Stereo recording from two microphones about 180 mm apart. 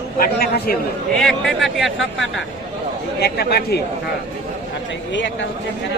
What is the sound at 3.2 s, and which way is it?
Speech, 60° left (ahead or behind).